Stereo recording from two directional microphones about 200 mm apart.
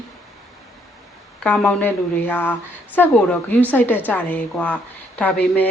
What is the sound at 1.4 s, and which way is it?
A woman's voice, 5° left (ahead or behind).